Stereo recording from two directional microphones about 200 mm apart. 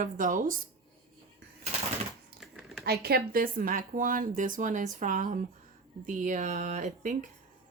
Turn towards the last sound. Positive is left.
turn(degrees=-40)  # may be behind; listen again after turning